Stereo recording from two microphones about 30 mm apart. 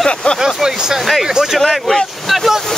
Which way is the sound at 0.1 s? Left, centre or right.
Left.